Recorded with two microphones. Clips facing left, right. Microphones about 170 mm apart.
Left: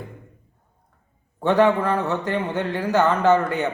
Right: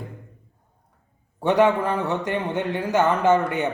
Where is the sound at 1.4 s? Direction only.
10° right (ahead or behind).